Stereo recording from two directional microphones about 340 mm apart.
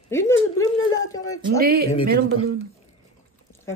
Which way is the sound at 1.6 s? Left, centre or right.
Right.